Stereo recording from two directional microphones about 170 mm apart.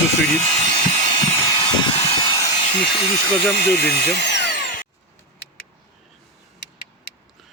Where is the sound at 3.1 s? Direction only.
Centre (ahead or behind).